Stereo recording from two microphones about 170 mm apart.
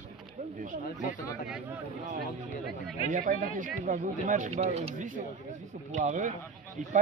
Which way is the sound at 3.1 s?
50° right (ahead or behind).